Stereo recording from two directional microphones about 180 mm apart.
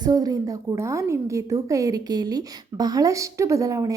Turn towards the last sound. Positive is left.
turn(degrees=-20)  # may be behind; listen again after turning